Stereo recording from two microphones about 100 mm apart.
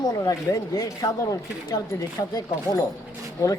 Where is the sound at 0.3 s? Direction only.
35° left (ahead or behind).